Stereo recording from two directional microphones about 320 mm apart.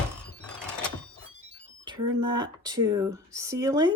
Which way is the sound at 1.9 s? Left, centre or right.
Centre.